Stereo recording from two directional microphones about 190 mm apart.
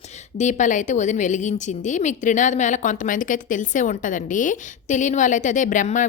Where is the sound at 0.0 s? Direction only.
35° left (ahead or behind).